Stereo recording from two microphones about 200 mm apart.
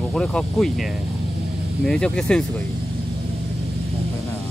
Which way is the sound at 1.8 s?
5° left (ahead or behind).